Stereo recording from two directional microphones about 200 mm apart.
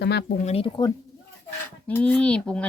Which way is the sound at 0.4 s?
30° left (ahead or behind).